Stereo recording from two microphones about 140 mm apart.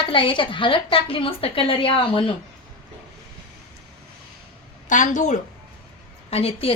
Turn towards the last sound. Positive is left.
turn(degrees=45)  # may be behind; listen again after turning